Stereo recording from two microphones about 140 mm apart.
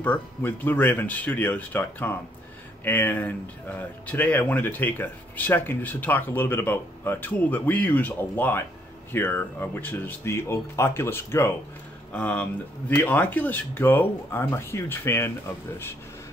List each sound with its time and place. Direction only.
0.0 s speech: 15° left (ahead or behind)